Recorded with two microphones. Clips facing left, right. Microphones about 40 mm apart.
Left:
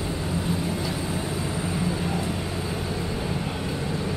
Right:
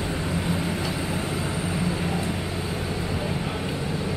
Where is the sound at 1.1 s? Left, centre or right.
Centre.